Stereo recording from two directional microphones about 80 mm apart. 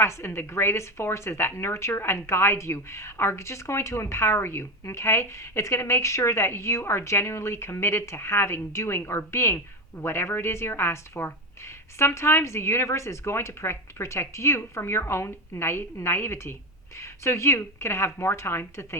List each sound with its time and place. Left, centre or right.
0.0 s a woman's voice: left